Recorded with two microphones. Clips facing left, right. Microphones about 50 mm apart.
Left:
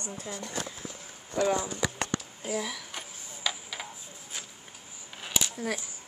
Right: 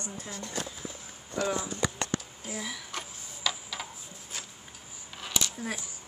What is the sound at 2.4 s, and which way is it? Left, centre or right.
Speech, left.